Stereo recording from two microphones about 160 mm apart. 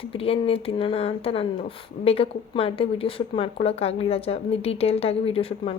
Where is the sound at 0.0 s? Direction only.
35° left (ahead or behind).